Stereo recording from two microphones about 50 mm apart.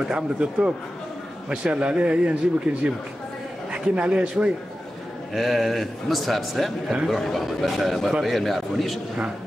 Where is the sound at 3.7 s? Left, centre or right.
Right.